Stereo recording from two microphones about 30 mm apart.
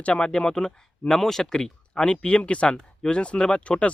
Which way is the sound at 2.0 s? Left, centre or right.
Left.